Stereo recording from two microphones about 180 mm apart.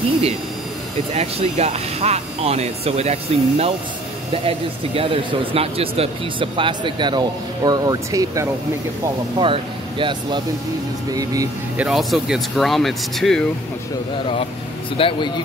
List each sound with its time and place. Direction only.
1.1 s speech: 35° right (ahead or behind); by 11.4 s 20° right (ahead or behind)
11.7 s speech: 5° right (ahead or behind)
15.0 s speech: 30° left (ahead or behind)